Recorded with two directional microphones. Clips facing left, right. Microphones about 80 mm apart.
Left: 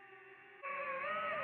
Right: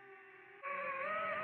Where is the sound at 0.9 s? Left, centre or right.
Right.